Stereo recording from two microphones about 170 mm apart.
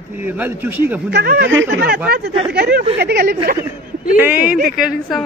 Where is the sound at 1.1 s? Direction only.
75° right (ahead or behind).